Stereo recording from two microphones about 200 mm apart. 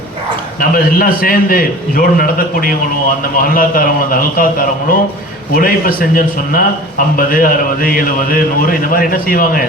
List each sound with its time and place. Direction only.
0.6 s speech: 45° left (ahead or behind)